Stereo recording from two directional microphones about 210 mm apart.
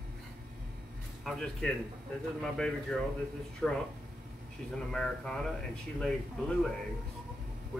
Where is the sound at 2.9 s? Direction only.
5° left (ahead or behind).